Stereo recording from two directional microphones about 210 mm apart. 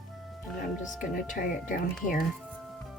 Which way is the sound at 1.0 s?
40° left (ahead or behind).